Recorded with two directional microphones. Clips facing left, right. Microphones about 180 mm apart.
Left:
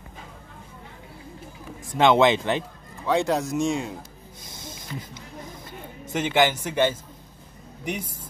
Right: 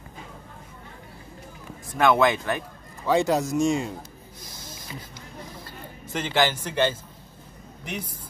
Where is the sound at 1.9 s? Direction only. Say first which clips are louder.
Left 2 dB; 25° left (ahead or behind).